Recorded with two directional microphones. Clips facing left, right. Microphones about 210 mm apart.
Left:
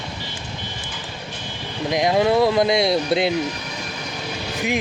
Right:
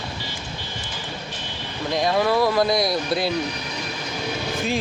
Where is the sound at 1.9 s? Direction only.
20° left (ahead or behind).